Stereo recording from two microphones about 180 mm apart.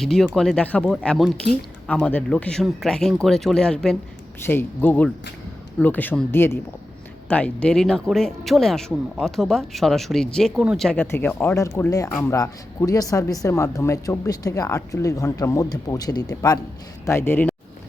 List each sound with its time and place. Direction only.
0.0 s speech: centre (ahead or behind)